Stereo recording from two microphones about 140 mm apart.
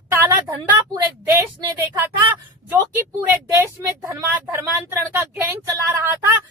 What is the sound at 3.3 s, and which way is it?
Speech, 15° right (ahead or behind).